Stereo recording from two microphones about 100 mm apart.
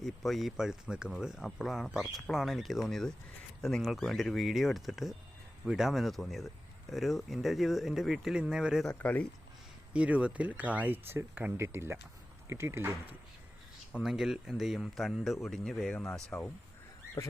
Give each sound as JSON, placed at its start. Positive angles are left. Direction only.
{"t": 0.0, "sound": "speech", "side_deg": 0}
{"t": 9.0, "sound": "speech", "side_deg": 15}
{"t": 9.9, "sound": "speech", "side_deg": -15}
{"t": 13.9, "sound": "speech", "side_deg": -5}